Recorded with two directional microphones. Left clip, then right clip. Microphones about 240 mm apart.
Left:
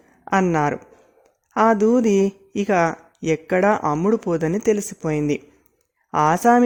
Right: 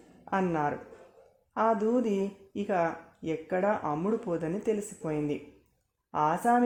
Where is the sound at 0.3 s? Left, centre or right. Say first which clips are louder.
Left 10 dB; left.